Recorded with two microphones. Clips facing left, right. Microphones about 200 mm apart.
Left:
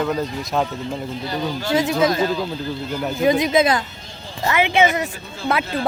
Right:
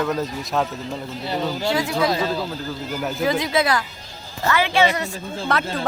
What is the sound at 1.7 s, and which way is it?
Speech, 20° left (ahead or behind).